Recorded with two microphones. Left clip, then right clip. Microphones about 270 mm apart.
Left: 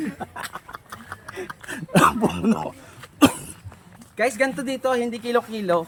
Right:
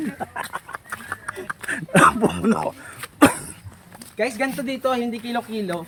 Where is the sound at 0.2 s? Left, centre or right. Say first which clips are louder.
Right 4 dB; centre.